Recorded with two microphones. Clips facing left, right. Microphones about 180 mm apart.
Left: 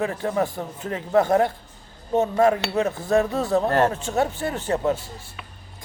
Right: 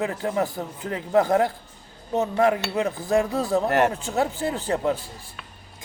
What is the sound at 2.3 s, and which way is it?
Cutlery, 35° left (ahead or behind).